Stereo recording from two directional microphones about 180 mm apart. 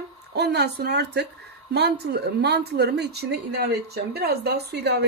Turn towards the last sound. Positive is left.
turn(degrees=-65)  # may be behind; listen again after turning